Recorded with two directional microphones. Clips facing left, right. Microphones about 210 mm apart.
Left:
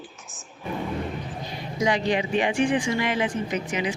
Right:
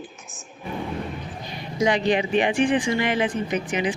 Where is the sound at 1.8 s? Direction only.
20° right (ahead or behind).